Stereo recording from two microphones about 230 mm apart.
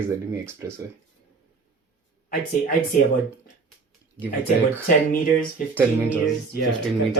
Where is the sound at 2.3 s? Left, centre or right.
Left.